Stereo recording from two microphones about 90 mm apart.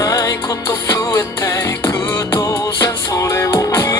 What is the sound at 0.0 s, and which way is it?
Music, 40° left (ahead or behind).